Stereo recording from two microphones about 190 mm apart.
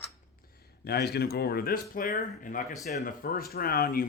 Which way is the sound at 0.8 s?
55° left (ahead or behind).